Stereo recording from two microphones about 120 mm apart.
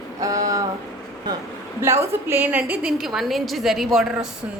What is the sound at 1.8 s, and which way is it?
A woman's voice, 20° right (ahead or behind).